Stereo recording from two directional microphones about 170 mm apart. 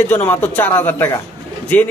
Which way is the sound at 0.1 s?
10° left (ahead or behind).